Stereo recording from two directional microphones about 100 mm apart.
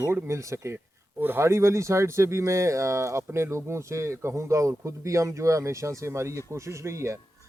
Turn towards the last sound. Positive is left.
turn(degrees=-30)  # may be behind; listen again after turning